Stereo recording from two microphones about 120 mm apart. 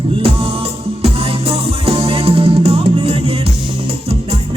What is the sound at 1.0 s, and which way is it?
Music, 55° right (ahead or behind).